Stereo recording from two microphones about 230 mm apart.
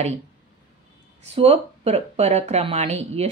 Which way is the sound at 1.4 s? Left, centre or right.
Right.